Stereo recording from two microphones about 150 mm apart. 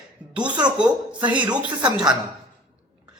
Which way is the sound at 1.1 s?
10° right (ahead or behind).